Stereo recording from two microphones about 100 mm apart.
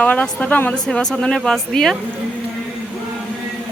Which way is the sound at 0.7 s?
5° left (ahead or behind).